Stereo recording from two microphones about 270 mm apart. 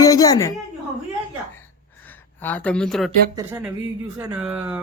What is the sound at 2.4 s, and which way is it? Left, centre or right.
Speech, centre.